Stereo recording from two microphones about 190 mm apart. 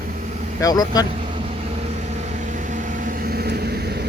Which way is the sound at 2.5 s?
40° right (ahead or behind).